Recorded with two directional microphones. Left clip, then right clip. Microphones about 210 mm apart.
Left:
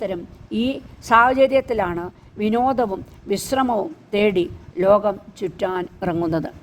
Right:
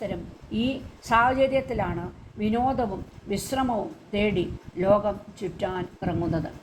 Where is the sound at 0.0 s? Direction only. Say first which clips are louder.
Left 6 dB; 60° left (ahead or behind).